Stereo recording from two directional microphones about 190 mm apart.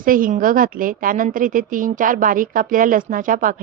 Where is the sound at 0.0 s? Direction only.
45° right (ahead or behind).